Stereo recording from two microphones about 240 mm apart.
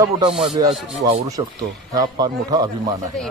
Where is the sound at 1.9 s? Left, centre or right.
Centre.